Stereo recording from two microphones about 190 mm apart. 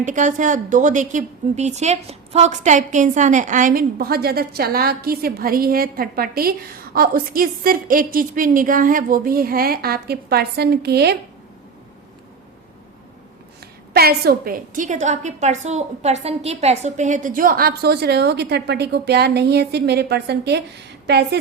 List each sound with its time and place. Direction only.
0.0 s a woman's voice: 40° right (ahead or behind); by 11.2 s 60° right (ahead or behind)
13.9 s a woman's voice: 55° right (ahead or behind)